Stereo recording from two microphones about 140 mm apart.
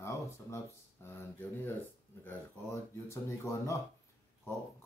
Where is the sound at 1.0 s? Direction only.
15° left (ahead or behind).